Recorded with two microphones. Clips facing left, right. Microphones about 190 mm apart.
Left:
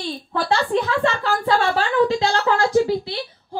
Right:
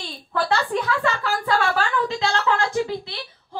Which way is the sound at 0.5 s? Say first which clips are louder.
Left 4 dB; 25° left (ahead or behind).